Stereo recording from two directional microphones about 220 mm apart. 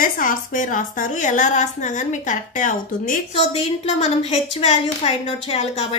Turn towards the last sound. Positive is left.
turn(degrees=30)  # may be behind; listen again after turning